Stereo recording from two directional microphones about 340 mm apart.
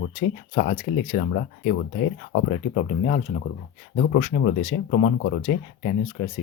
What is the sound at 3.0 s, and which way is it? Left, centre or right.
Speech, left.